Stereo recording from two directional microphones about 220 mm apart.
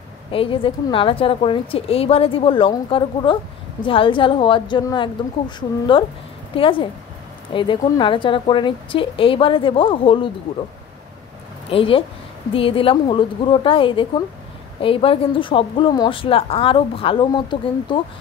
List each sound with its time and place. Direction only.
0.3 s a woman's voice: 25° left (ahead or behind)
11.7 s a woman's voice: 25° left (ahead or behind)